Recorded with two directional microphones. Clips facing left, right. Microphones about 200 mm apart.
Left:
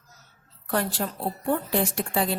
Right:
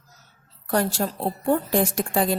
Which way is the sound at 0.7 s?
40° right (ahead or behind).